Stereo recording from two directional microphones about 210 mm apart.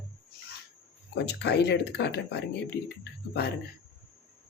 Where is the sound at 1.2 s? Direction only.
55° left (ahead or behind).